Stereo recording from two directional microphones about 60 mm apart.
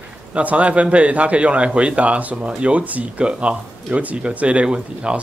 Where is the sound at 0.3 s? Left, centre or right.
Right.